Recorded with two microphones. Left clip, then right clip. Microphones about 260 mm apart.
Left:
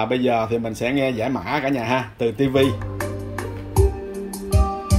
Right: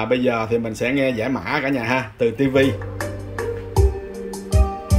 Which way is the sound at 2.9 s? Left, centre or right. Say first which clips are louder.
Right 1 dB; left.